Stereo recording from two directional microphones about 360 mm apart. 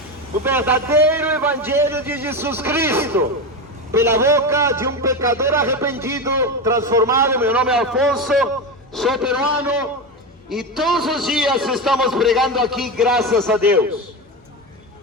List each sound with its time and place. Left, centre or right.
0.4 s a man's voice: centre